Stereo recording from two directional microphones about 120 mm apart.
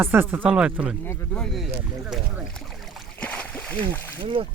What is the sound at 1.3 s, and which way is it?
Speech, 5° left (ahead or behind).